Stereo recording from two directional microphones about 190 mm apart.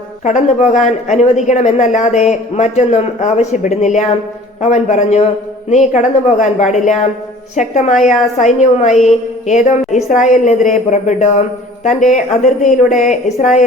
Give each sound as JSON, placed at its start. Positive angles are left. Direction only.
{"t": 0.3, "sound": "a woman's voice", "side_deg": 35}